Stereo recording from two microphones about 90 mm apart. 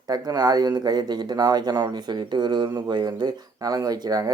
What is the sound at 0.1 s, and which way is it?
Speech, 45° right (ahead or behind).